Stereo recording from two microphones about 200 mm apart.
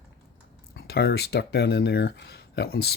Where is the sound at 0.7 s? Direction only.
55° left (ahead or behind).